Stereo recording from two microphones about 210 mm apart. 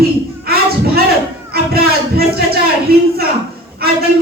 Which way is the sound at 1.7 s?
45° right (ahead or behind).